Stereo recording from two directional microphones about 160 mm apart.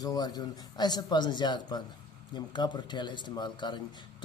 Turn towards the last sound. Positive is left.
turn(degrees=30)  # may be behind; listen again after turning